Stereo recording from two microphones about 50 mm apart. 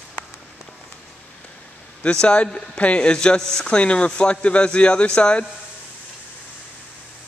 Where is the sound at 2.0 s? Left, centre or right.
Centre.